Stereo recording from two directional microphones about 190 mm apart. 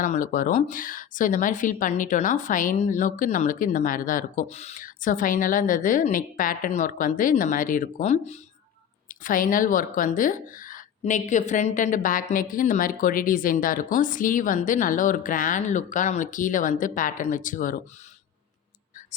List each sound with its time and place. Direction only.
0.0 s speech: 45° left (ahead or behind)